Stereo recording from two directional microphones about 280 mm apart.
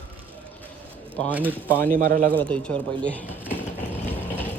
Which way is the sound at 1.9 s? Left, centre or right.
Right.